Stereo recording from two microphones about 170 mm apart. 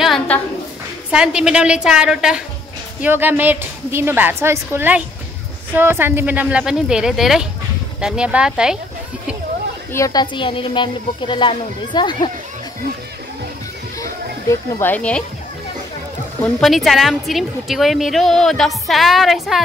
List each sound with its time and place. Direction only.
0.0 s a sound: centre (ahead or behind)
1.1 s a woman's voice: 5° right (ahead or behind)
9.9 s speech: 20° left (ahead or behind)
14.5 s speech: 10° left (ahead or behind)
16.6 s a woman's voice: centre (ahead or behind)